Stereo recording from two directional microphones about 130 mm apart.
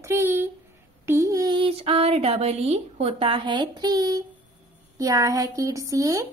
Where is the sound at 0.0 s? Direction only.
20° right (ahead or behind).